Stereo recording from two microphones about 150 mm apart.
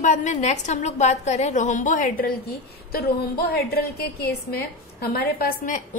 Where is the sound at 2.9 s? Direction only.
85° left.